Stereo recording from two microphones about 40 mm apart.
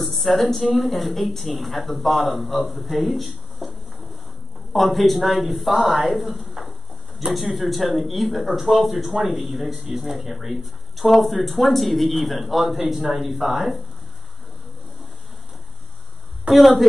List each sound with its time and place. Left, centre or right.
0.0 s speech: centre
4.7 s speech: centre
7.2 s a man's voice: right
7.5 s speech: centre
16.5 s speech: centre